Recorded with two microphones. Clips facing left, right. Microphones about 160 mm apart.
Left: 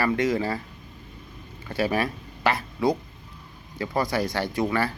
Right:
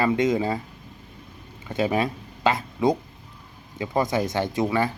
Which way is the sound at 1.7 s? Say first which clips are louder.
Right 2 dB; 20° right (ahead or behind).